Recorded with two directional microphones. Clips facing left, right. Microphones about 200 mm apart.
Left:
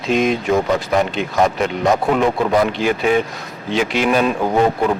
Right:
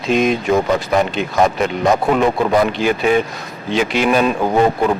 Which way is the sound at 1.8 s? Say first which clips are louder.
Right 1 dB; 25° right (ahead or behind).